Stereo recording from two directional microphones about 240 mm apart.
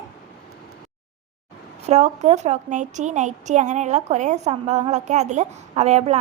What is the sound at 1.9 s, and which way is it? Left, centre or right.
A woman's voice, right.